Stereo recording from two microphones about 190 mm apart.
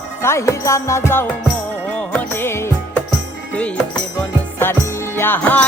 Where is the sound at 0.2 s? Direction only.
15° left (ahead or behind).